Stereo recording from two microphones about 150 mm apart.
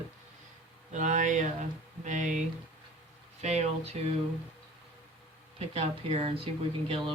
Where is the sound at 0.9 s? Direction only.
55° right (ahead or behind).